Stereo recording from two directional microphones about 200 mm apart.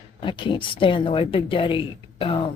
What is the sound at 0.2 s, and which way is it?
Speech, 25° left (ahead or behind).